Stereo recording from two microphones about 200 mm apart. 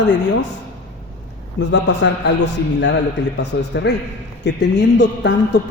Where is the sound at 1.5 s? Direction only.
65° left (ahead or behind).